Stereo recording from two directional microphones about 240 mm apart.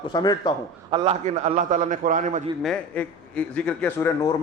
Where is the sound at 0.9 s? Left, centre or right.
Right.